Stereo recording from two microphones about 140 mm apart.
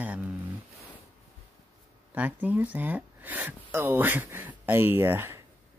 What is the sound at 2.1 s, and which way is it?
Speech, 10° right (ahead or behind).